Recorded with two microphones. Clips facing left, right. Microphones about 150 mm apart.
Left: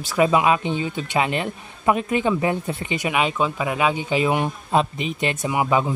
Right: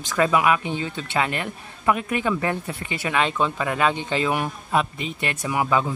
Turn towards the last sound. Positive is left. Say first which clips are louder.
# left 2 dB
turn(degrees=20)  # may be behind; listen again after turning